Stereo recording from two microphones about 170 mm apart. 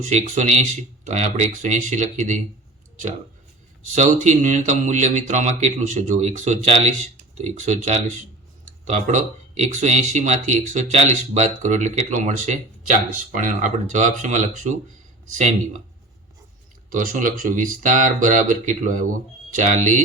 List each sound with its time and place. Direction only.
0.0 s speech: 45° right (ahead or behind)
3.8 s speech: 45° right (ahead or behind)
16.9 s speech: 50° right (ahead or behind)